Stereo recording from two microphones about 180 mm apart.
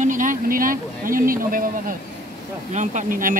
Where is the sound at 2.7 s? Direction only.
45° right (ahead or behind).